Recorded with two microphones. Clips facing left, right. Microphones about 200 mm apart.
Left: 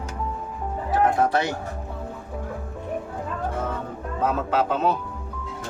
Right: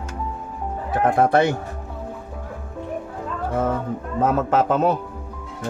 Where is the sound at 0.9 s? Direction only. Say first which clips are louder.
Right 3 dB; 55° right (ahead or behind).